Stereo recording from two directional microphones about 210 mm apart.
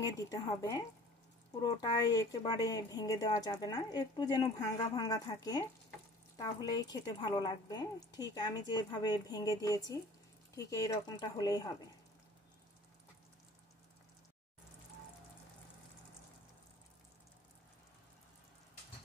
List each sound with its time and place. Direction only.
0.0 s speech: 15° left (ahead or behind)